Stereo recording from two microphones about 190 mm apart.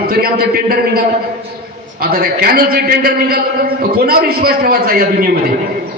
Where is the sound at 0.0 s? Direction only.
55° right (ahead or behind).